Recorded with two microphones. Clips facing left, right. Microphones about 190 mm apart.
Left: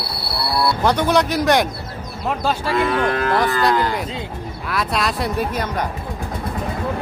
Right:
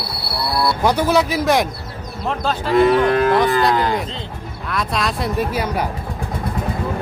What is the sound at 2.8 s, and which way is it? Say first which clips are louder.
Moo: right 7 dB; 20° right (ahead or behind).